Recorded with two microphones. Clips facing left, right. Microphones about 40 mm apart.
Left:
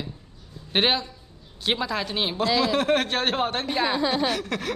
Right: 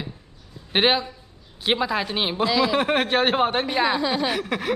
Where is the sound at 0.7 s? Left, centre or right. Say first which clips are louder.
Right 3 dB; centre.